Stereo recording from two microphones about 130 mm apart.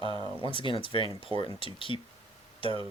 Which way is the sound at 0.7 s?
40° left (ahead or behind).